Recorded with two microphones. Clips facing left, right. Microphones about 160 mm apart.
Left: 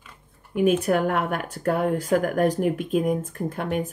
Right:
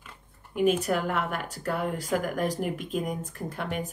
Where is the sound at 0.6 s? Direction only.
55° left (ahead or behind).